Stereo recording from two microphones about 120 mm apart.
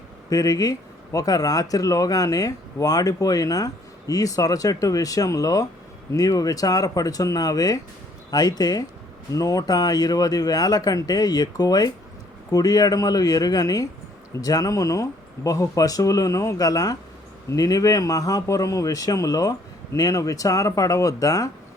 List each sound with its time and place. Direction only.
0.3 s speech: 30° left (ahead or behind)